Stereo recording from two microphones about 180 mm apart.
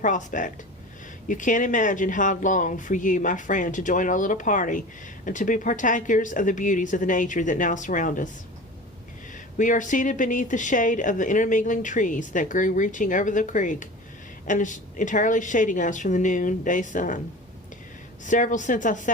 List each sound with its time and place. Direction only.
0.0 s speech: 45° left (ahead or behind)
9.6 s speech: 45° left (ahead or behind)
18.3 s speech: 45° left (ahead or behind)